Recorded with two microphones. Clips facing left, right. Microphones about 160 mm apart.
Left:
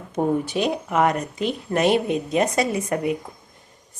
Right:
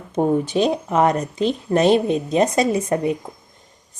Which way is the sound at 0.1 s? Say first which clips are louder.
Right 3 dB; 25° right (ahead or behind).